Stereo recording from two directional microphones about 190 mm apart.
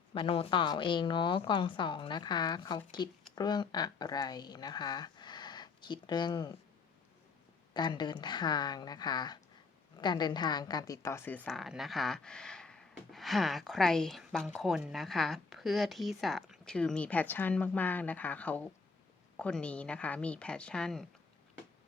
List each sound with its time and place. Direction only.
0.1 s a woman's voice: 30° left (ahead or behind)
7.7 s a woman's voice: 20° left (ahead or behind)
11.4 s speech: centre (ahead or behind)